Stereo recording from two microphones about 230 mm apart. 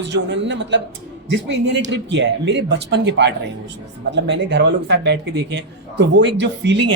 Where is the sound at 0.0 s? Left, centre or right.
Right.